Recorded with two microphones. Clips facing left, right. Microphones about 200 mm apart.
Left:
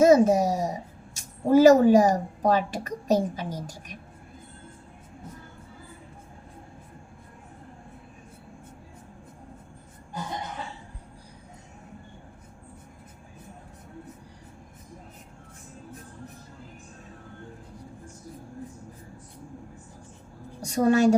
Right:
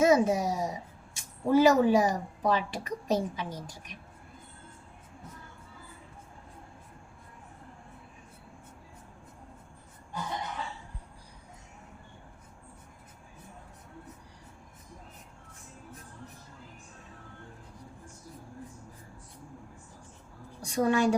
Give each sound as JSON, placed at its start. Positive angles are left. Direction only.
{"t": 0.0, "sound": "a woman's voice", "side_deg": 40}
{"t": 20.6, "sound": "a woman's voice", "side_deg": 40}